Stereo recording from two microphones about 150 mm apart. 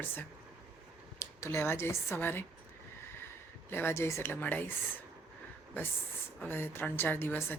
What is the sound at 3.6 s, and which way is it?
Speech, 15° left (ahead or behind).